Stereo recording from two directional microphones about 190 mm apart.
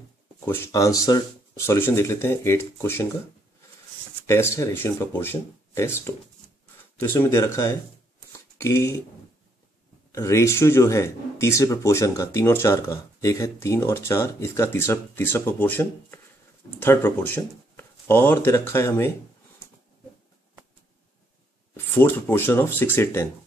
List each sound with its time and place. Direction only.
0.5 s speech: 15° left (ahead or behind)
4.3 s speech: 15° left (ahead or behind)
10.1 s speech: 15° left (ahead or behind)
21.7 s speech: 10° left (ahead or behind)